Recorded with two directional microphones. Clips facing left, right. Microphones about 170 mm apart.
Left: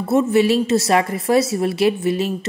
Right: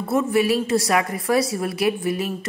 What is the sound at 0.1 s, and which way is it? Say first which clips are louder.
A woman's voice: left 4 dB; 25° left (ahead or behind).